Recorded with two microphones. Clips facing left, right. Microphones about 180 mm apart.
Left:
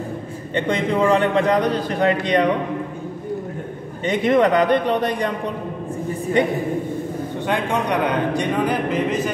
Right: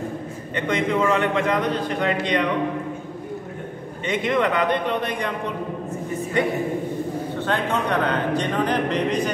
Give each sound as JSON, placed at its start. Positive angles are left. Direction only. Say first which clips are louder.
{"t": 0.6, "sound": "a man's voice", "louder": "left 2 dB", "side_deg": 35}
{"t": 4.0, "sound": "a man's voice", "louder": "left 5 dB", "side_deg": 40}
{"t": 6.4, "sound": "a woman's voice", "louder": "left 2 dB", "side_deg": 20}